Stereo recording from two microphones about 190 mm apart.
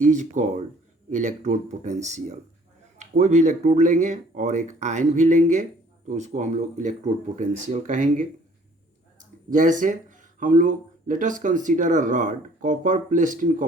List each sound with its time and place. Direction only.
0.0 s speech: 40° right (ahead or behind)